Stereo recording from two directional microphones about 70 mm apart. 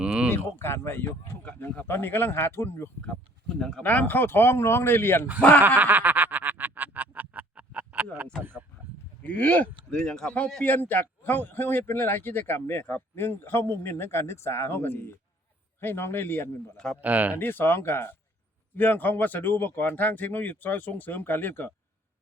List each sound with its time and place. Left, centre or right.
0.0 s a sound: centre
0.3 s speech: left
3.6 s speech: centre
3.8 s speech: left
5.4 s speech: centre
5.6 s a sound: right
9.2 s speech: left
9.9 s speech: centre
10.6 s speech: left
16.7 s speech: centre
17.0 s speech: right
17.4 s speech: left